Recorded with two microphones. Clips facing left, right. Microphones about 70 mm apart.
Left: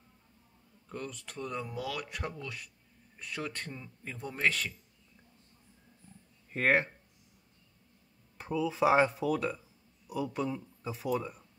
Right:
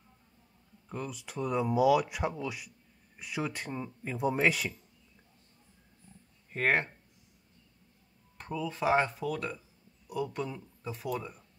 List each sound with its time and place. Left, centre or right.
0.8 s speech: centre
6.5 s speech: centre
8.4 s speech: centre